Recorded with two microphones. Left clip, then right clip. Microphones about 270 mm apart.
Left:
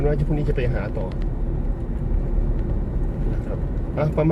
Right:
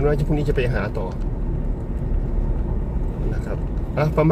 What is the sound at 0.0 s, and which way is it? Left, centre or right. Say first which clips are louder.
Speech: right 3 dB; right.